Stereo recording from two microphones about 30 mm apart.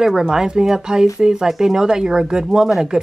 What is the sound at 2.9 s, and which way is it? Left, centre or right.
Chopping, right.